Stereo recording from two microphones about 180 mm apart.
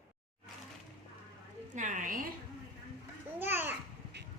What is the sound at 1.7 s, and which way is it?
Speech, 45° right (ahead or behind).